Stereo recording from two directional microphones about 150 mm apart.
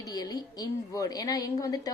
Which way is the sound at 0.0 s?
25° left (ahead or behind).